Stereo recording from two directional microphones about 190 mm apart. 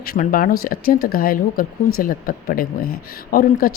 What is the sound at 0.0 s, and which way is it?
Speech, 50° left (ahead or behind).